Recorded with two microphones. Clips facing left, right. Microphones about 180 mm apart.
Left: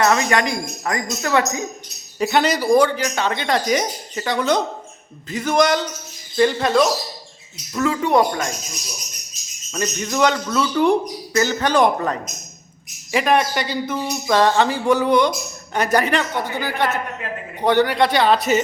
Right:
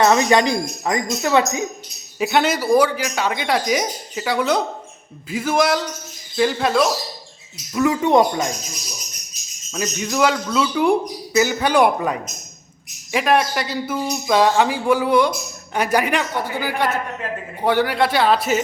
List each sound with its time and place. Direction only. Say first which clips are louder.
0.0 s speech: right 3 dB; 25° right (ahead or behind)
2.1 s speech: even; 5° right (ahead or behind)
7.8 s speech: right 2 dB; 20° right (ahead or behind)
9.7 s speech: even; 5° right (ahead or behind)